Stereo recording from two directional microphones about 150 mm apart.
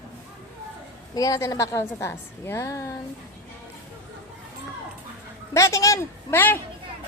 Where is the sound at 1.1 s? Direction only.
25° left (ahead or behind).